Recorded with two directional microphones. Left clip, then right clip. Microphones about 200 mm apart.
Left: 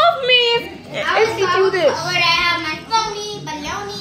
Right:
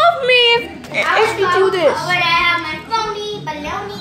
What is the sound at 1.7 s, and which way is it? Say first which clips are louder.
Speech: right 2 dB; 20° right (ahead or behind).